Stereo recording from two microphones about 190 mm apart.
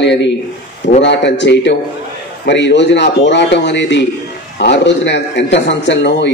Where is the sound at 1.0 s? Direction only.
70° left (ahead or behind).